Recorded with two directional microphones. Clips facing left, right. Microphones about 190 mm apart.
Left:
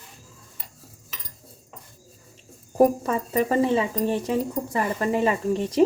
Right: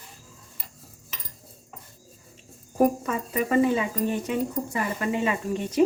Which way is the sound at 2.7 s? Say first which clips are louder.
Left 3 dB; 35° left (ahead or behind).